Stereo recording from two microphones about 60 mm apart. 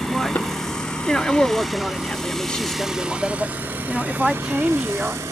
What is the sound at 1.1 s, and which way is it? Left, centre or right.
Speech, centre.